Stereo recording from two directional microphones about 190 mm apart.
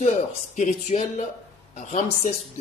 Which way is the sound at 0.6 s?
40° left (ahead or behind).